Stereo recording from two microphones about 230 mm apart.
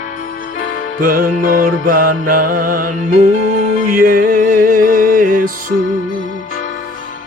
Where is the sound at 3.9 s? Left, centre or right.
Right.